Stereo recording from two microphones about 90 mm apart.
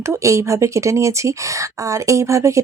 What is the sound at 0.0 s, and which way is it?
Speech, 35° right (ahead or behind).